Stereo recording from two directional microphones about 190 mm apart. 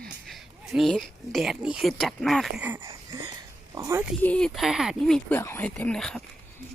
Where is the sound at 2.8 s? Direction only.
20° right (ahead or behind).